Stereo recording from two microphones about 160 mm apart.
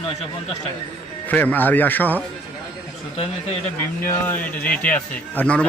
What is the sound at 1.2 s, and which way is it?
Speech, 10° left (ahead or behind).